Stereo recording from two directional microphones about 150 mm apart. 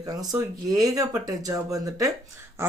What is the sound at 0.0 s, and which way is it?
Speech, 25° right (ahead or behind).